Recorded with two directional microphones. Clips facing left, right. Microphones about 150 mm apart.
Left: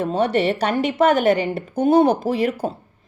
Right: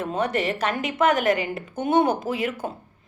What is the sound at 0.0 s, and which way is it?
A woman's voice, 30° left (ahead or behind).